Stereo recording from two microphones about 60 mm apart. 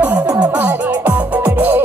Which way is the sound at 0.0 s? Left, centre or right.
Right.